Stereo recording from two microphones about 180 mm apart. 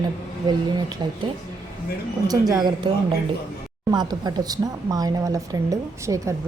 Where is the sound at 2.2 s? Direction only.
20° right (ahead or behind).